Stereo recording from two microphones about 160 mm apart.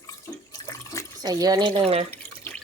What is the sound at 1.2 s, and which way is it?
Speech, 25° right (ahead or behind).